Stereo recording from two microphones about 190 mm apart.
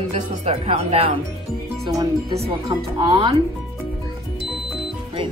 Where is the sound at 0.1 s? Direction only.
35° right (ahead or behind).